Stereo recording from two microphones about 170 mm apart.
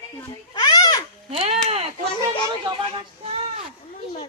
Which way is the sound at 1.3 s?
35° right (ahead or behind).